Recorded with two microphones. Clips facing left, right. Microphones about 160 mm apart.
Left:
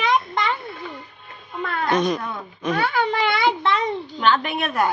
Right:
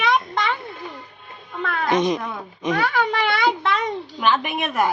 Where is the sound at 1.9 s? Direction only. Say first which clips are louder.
Right 1 dB; 20° right (ahead or behind).